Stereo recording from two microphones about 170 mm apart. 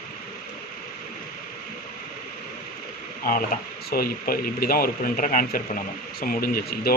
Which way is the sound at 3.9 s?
60° left (ahead or behind).